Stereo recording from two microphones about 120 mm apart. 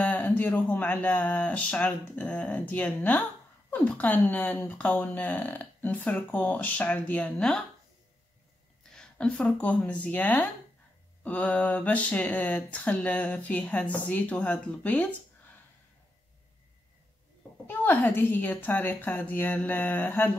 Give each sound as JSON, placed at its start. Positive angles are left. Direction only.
{"t": 0.0, "sound": "speech", "side_deg": 10}
{"t": 8.9, "sound": "speech", "side_deg": 5}
{"t": 17.6, "sound": "speech", "side_deg": 15}